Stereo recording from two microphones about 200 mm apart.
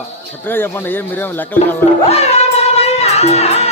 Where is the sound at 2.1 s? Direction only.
30° left (ahead or behind).